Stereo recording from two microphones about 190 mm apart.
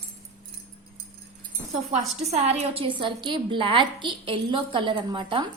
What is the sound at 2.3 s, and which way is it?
A woman's voice, 35° right (ahead or behind).